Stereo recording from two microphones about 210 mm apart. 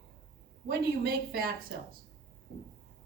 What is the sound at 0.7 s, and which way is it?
Speech, 45° right (ahead or behind).